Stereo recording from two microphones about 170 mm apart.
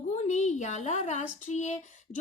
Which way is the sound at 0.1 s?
45° left (ahead or behind).